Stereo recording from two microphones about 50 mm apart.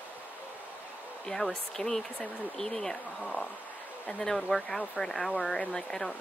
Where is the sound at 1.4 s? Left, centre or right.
Centre.